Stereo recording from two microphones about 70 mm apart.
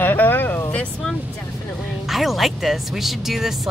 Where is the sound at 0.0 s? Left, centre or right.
Left.